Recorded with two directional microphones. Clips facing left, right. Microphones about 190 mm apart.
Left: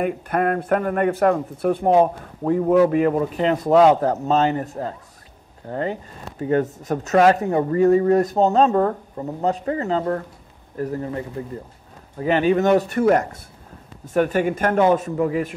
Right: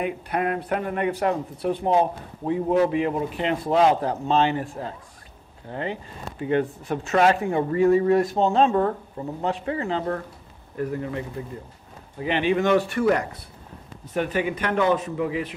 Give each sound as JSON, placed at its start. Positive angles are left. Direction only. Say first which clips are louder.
{"t": 0.0, "sound": "a man's voice", "louder": "left 4 dB", "side_deg": 50}